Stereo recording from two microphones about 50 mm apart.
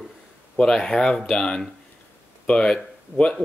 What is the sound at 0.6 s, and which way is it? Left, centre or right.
Speech, centre.